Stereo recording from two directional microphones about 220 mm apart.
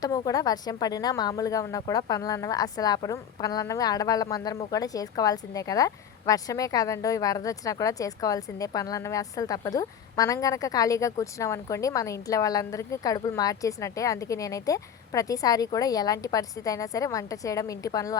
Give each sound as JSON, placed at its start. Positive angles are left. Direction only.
{"t": 0.0, "sound": "a woman's voice", "side_deg": 15}